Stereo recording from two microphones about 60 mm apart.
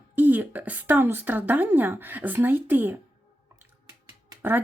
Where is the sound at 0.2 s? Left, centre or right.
Right.